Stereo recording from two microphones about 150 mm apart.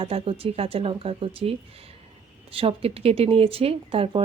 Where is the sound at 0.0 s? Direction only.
40° right (ahead or behind).